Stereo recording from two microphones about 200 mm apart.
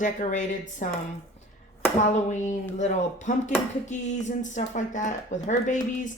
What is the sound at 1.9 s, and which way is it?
Speech, 35° left (ahead or behind).